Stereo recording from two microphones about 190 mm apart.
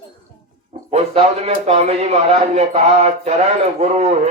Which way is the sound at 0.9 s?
35° right (ahead or behind).